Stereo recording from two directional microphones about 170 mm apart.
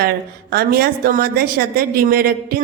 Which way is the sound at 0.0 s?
65° right (ahead or behind).